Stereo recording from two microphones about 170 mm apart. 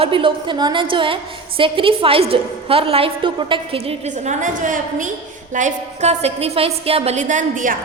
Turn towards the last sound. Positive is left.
turn(degrees=-50)  # may be behind; listen again after turning